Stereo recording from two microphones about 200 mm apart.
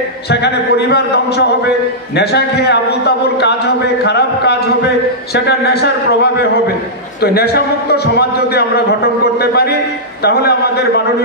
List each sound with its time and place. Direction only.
0.3 s a man's voice: 55° left (ahead or behind)
7.2 s a man's voice: 55° left (ahead or behind)